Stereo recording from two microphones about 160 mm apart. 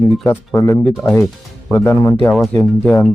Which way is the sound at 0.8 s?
Centre (ahead or behind).